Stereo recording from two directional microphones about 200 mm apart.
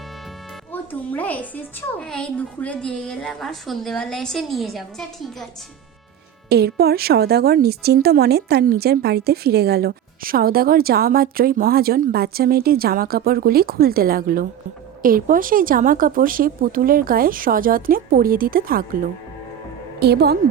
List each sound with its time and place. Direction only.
0.7 s a woman's voice: 10° left (ahead or behind)
6.5 s a woman's voice: 55° right (ahead or behind)
20.0 s a woman's voice: 55° right (ahead or behind)